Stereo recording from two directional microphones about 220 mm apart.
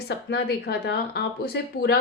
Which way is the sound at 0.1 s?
45° left (ahead or behind).